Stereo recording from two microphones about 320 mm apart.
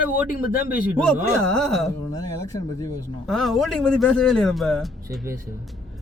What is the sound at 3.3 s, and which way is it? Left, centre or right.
Speech, centre.